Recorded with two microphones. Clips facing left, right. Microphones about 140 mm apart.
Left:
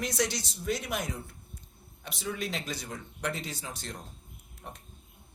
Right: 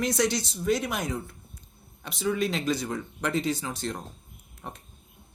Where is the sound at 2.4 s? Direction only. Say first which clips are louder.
Right 9 dB; 90° right.